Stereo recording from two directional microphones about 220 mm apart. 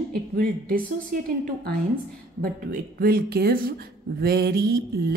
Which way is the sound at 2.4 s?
40° right (ahead or behind).